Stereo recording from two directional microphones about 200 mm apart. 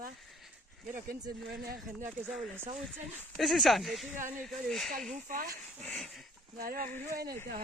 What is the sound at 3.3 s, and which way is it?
Speech, centre (ahead or behind).